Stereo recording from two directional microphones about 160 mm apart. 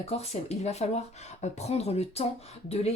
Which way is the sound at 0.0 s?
40° left (ahead or behind).